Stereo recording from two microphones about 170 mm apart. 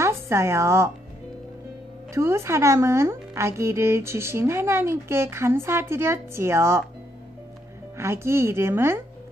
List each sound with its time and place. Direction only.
0.0 s a woman's voice: 15° right (ahead or behind)
2.1 s a woman's voice: 15° right (ahead or behind)
8.0 s a woman's voice: 15° right (ahead or behind)